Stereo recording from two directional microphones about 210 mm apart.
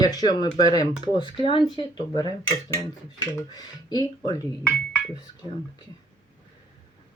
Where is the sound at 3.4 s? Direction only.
20° left (ahead or behind).